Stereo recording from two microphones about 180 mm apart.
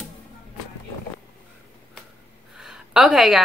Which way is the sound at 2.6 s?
5° right (ahead or behind).